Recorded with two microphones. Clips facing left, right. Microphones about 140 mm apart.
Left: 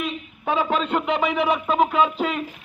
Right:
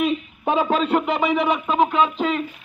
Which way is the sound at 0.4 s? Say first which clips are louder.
Right 2 dB; 15° right (ahead or behind).